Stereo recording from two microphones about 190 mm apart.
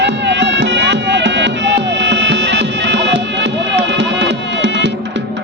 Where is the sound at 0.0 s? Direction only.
65° right (ahead or behind).